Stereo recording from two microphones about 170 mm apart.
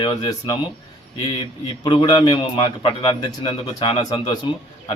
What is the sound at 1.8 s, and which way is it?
A man's voice, 30° left (ahead or behind).